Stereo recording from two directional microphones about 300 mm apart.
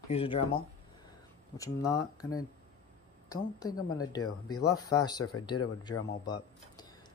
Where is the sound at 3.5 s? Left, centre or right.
Centre.